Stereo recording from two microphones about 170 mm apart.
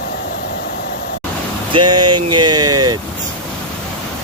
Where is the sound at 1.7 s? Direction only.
25° right (ahead or behind).